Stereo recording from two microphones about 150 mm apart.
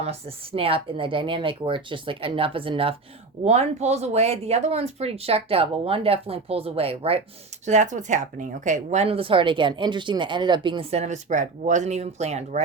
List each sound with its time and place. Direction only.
0.0 s speech: 40° right (ahead or behind)
7.6 s speech: 50° right (ahead or behind)